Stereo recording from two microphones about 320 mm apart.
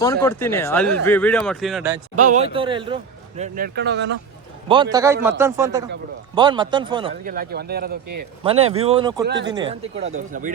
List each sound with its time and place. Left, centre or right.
0.0 s speech: centre
2.1 s a man's voice: right
4.7 s a man's voice: centre
7.3 s a man's voice: right
8.4 s a man's voice: centre
9.2 s speech: right
9.5 s a man's voice: centre